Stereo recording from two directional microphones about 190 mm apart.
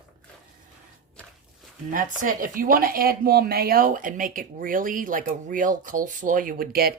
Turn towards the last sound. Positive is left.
turn(degrees=-50)  # may be behind; listen again after turning